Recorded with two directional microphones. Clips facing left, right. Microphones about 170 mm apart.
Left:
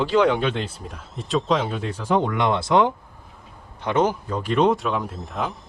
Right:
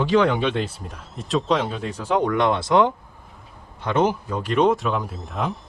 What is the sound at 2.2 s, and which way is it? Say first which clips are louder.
Speech: right 2 dB; 20° left (ahead or behind).